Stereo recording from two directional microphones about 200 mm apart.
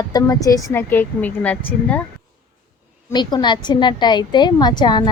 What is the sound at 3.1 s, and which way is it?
A woman's voice, 20° left (ahead or behind).